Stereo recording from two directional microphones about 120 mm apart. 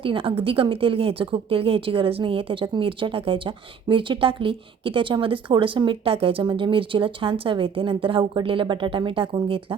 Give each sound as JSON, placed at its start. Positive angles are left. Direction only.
{"t": 0.0, "sound": "a woman's voice", "side_deg": -50}